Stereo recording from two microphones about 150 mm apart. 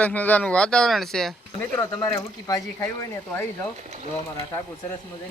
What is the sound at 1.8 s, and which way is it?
Speech, 25° left (ahead or behind).